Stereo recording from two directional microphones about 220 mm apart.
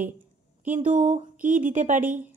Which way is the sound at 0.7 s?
35° right (ahead or behind).